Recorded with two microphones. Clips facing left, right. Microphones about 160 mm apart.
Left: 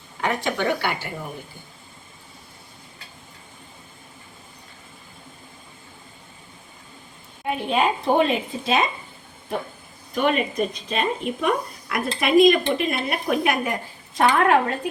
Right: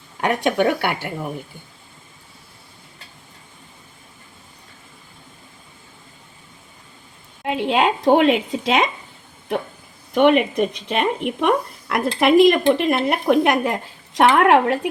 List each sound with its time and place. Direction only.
0.2 s speech: 60° right (ahead or behind)
7.4 s a woman's voice: 90° right
10.2 s speech: 70° right (ahead or behind)